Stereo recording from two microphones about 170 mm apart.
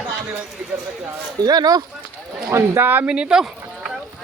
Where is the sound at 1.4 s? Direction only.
25° right (ahead or behind); by 3.4 s 5° right (ahead or behind).